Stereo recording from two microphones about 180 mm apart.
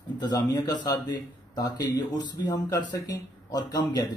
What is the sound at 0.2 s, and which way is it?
A man's voice, 20° left (ahead or behind).